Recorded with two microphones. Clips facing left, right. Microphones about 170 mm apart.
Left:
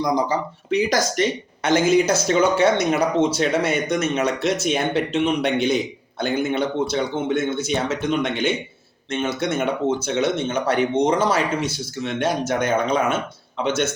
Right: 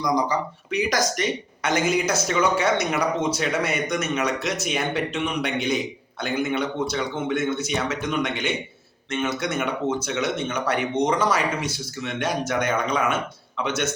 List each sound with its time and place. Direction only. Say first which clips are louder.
0.0 s a man's voice: left 2 dB; 25° left (ahead or behind)